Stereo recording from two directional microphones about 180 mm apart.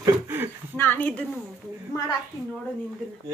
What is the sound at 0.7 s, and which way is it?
Speech, 10° left (ahead or behind).